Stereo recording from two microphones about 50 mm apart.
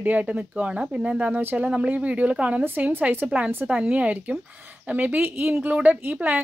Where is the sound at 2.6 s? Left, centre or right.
Right.